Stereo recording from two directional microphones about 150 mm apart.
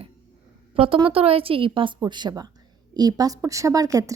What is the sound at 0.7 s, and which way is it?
A woman's voice, 35° right (ahead or behind).